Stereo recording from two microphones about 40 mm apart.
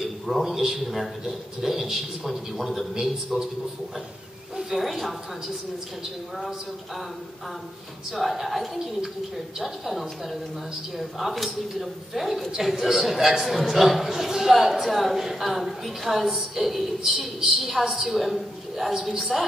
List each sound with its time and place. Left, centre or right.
0.0 s a man's voice: centre
4.6 s speech: centre
8.1 s a man's voice: centre